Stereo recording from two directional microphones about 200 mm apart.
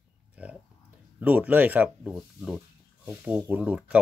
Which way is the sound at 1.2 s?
10° right (ahead or behind).